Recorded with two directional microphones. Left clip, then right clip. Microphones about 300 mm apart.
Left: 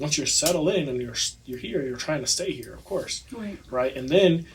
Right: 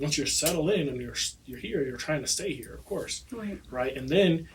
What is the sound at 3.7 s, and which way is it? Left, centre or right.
Speech, centre.